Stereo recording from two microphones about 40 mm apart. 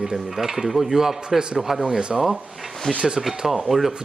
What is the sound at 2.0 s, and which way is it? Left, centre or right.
Speech, centre.